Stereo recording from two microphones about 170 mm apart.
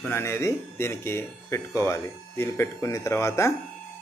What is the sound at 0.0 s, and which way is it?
Speech, 15° left (ahead or behind).